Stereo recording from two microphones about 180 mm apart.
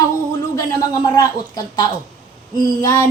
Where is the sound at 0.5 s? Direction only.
20° left (ahead or behind).